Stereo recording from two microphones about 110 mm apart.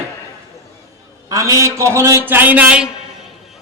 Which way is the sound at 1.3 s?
30° right (ahead or behind).